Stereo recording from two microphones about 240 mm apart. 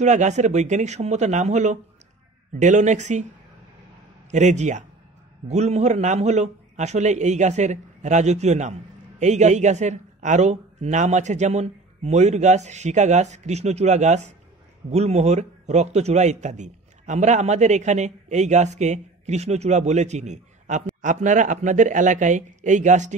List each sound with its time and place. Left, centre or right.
0.0 s a man's voice: right
4.3 s a man's voice: right